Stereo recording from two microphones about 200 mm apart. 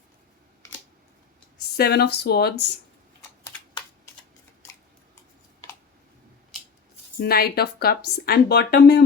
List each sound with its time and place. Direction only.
1.7 s speech: 55° left (ahead or behind)
7.2 s speech: 50° left (ahead or behind)